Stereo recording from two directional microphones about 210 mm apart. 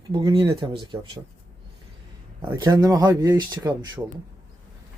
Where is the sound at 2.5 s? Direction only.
20° right (ahead or behind).